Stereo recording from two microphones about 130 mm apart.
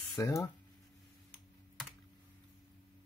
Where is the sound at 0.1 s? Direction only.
25° left (ahead or behind).